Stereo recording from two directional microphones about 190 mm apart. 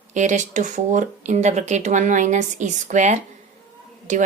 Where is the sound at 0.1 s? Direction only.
40° right (ahead or behind).